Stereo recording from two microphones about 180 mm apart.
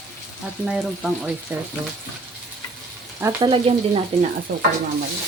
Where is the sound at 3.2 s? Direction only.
25° right (ahead or behind).